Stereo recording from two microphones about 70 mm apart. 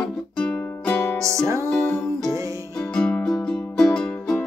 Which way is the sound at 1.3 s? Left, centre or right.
Right.